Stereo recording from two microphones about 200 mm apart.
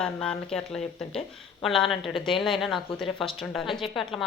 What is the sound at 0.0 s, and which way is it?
Speech, 5° left (ahead or behind).